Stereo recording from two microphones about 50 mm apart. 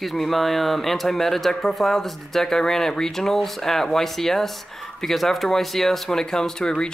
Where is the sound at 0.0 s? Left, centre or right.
Centre.